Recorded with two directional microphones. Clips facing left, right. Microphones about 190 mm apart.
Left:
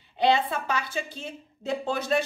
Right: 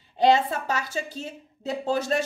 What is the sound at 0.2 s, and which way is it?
A woman's voice, 40° right (ahead or behind).